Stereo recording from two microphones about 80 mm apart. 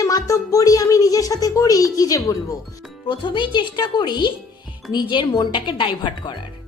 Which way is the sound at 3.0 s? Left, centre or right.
Left.